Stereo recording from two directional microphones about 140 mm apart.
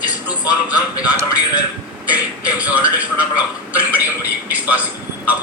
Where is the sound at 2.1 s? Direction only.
10° right (ahead or behind).